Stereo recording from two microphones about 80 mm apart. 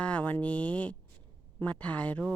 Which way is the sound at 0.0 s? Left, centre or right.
Centre.